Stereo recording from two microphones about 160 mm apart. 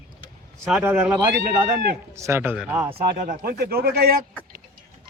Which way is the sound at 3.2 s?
60° right (ahead or behind).